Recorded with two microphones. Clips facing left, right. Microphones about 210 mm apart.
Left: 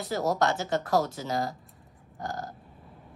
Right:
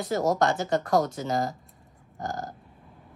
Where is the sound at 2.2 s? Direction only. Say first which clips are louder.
Right 2 dB; 45° right (ahead or behind).